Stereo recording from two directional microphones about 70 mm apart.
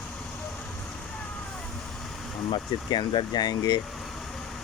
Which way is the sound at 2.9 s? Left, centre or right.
Left.